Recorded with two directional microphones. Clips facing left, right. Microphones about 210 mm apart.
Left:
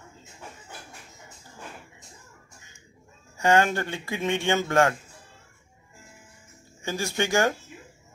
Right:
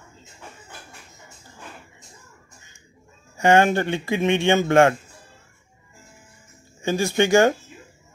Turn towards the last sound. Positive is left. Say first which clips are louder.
# right 7 dB
turn(degrees=-20)  # may be behind; listen again after turning